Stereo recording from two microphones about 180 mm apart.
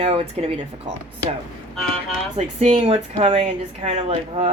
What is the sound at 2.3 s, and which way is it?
Speech, 35° right (ahead or behind).